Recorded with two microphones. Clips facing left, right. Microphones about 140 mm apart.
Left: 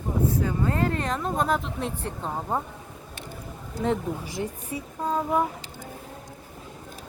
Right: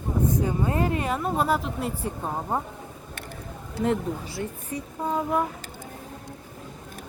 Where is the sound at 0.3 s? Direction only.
20° right (ahead or behind).